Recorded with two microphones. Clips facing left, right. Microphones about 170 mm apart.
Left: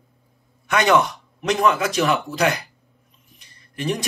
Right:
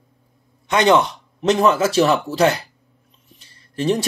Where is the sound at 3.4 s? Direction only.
30° right (ahead or behind).